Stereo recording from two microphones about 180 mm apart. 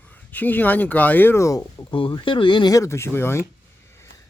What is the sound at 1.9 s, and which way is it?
Speech, 30° left (ahead or behind).